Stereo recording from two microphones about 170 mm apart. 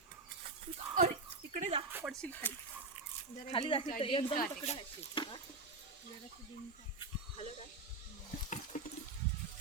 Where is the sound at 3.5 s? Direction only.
30° left (ahead or behind).